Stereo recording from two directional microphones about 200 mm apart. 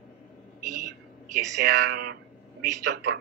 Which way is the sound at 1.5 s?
60° right (ahead or behind).